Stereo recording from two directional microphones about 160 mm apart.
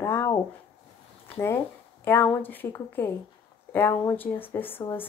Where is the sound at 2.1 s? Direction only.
15° left (ahead or behind).